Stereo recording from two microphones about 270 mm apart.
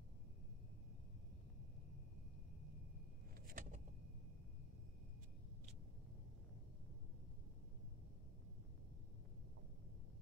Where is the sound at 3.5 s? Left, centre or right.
Right.